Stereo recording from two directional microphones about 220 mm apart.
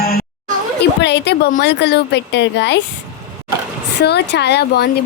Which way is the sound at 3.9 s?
50° left (ahead or behind).